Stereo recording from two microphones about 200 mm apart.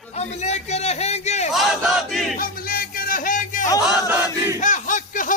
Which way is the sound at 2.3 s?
45° left (ahead or behind).